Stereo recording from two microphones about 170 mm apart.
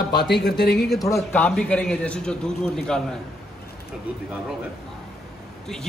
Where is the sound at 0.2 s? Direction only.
80° left.